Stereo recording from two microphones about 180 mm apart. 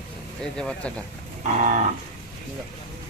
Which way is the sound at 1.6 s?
45° right (ahead or behind).